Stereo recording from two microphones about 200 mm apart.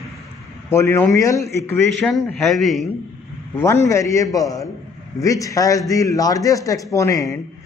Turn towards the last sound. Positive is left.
turn(degrees=15)  # may be behind; listen again after turning